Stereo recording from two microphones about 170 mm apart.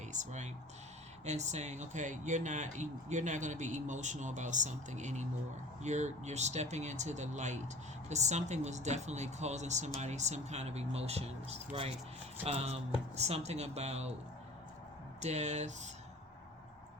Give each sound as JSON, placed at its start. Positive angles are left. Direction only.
{"t": 0.0, "sound": "speech", "side_deg": -45}
{"t": 15.2, "sound": "speech", "side_deg": -40}